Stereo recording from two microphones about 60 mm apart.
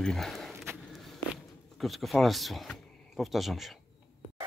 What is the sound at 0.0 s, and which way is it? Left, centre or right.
Speech, centre.